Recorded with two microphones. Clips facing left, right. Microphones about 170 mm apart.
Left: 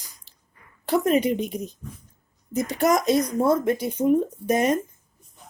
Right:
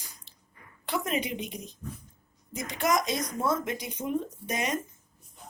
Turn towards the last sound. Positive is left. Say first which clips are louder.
# left 10 dB
turn(degrees=50)  # may be behind; listen again after turning